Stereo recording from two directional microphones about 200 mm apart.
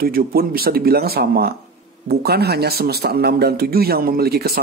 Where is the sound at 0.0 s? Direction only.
45° right (ahead or behind).